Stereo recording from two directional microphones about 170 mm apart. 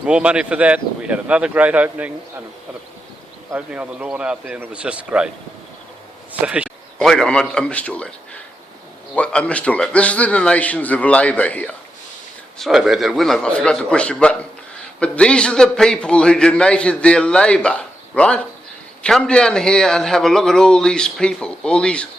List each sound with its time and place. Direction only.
0.0 s speech: 5° right (ahead or behind)
3.5 s speech: 5° right (ahead or behind)
6.4 s speech: 5° right (ahead or behind)
6.7 s a man's voice: 5° left (ahead or behind)
9.1 s a man's voice: 5° left (ahead or behind)